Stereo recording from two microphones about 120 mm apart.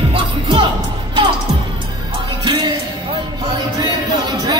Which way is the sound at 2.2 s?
35° right (ahead or behind).